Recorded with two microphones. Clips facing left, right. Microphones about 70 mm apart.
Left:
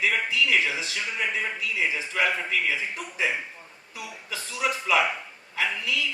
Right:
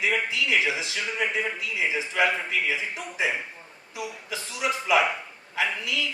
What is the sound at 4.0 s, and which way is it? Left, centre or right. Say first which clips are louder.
A man's voice: right 3 dB; right.